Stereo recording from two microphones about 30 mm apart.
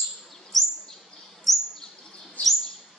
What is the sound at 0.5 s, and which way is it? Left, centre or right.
Bird vocalization, centre.